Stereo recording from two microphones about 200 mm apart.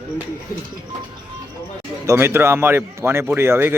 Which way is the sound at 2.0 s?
15° right (ahead or behind).